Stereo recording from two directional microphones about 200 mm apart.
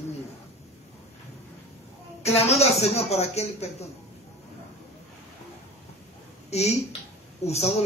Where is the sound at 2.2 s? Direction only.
30° left (ahead or behind).